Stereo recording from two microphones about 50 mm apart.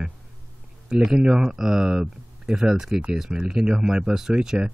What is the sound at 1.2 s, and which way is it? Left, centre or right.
Speech, centre.